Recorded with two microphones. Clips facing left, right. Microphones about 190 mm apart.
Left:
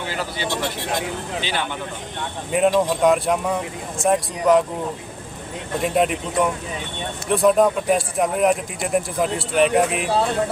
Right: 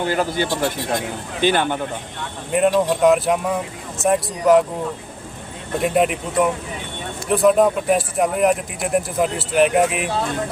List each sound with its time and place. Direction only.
0.0 s speech: 50° right (ahead or behind)
2.5 s speech: centre (ahead or behind)
5.8 s speech: centre (ahead or behind)